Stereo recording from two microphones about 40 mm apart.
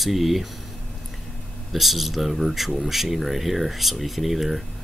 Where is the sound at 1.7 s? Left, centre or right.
Centre.